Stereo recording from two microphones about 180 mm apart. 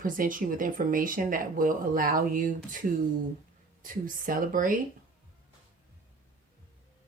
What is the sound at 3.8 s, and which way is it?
Speech, 50° right (ahead or behind).